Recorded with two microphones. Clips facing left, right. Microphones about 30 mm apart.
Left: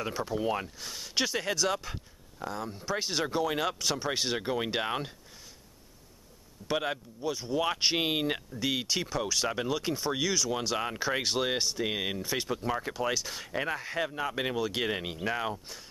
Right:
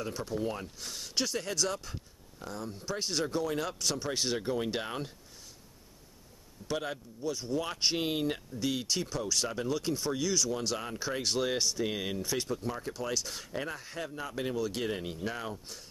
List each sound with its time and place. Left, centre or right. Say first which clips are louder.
0.4 s speech: left 4 dB; left
6.7 s speech: left 4 dB; left
8.5 s speech: left 2 dB; left
10.8 s speech: left 4 dB; left
12.4 s speech: left 4 dB; left
12.9 s speech: left 4 dB; centre; by 14.6 s left
14.6 s speech: left 2 dB; left
15.0 s speech: left 4 dB; left